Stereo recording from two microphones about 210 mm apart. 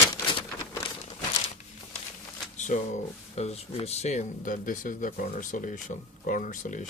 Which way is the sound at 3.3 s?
30° left (ahead or behind).